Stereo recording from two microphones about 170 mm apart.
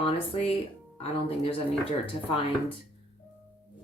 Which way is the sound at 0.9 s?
35° left (ahead or behind).